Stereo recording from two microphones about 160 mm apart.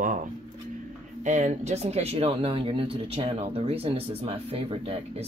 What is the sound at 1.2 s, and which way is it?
Speech, 50° right (ahead or behind).